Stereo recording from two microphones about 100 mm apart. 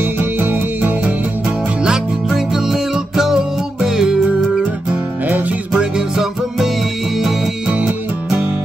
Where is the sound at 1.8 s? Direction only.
5° right (ahead or behind).